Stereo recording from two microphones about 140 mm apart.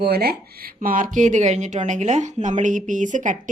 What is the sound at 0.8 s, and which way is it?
A woman's voice, 70° right (ahead or behind).